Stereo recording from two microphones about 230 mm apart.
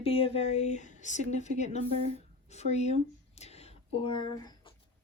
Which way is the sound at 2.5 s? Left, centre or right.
Left.